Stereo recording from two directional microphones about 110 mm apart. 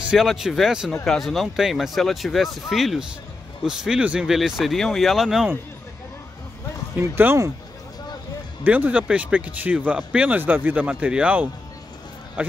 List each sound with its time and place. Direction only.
0.0 s speech: 5° right (ahead or behind)
7.0 s speech: 20° right (ahead or behind)
8.6 s speech: 15° right (ahead or behind)
12.4 s music: 15° right (ahead or behind)